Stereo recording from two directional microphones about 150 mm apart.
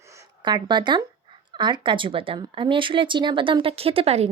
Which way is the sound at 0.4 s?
30° right (ahead or behind).